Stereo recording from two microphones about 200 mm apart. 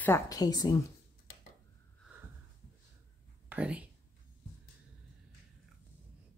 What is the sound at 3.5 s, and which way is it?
Speech, 5° right (ahead or behind).